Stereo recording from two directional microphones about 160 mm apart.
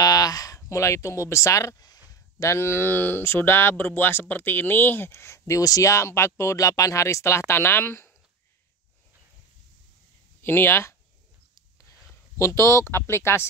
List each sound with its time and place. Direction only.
0.0 s speech: 25° left (ahead or behind)
10.4 s speech: 15° left (ahead or behind)
12.4 s speech: 20° left (ahead or behind)